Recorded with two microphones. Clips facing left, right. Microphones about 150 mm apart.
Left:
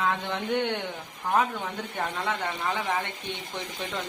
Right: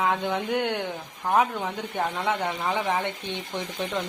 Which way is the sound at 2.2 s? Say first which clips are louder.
Right 3 dB; 10° right (ahead or behind).